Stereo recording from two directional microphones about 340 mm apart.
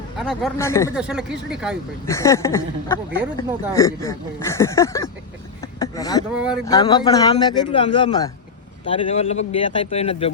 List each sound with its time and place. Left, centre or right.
0.2 s speech: centre
0.9 s speech: centre
2.0 s speech: centre
5.8 s a sound: centre
6.3 s speech: centre
6.7 s speech: centre